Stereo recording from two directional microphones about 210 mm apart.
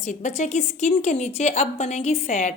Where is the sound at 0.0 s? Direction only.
35° left (ahead or behind).